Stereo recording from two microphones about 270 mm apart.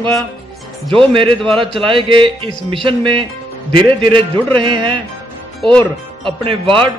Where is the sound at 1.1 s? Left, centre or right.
Centre.